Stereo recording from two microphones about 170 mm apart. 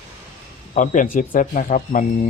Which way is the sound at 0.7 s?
50° left (ahead or behind).